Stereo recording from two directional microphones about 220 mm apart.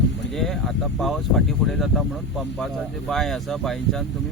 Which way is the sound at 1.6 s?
Centre (ahead or behind).